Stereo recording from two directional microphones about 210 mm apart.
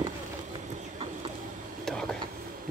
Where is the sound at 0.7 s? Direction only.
30° right (ahead or behind).